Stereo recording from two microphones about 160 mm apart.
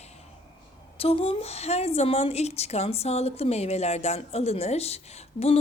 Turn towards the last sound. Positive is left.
turn(degrees=40)  # may be behind; listen again after turning